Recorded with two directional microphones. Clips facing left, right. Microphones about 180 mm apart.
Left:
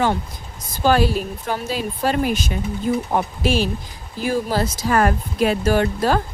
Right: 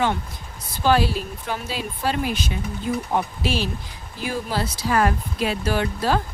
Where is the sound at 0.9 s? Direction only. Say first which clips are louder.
Left 3 dB; 45° left (ahead or behind).